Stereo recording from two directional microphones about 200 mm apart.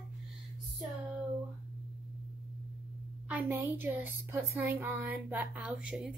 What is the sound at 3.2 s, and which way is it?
A woman's voice, 10° right (ahead or behind).